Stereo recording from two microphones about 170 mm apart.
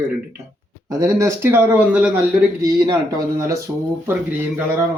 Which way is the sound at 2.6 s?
25° right (ahead or behind).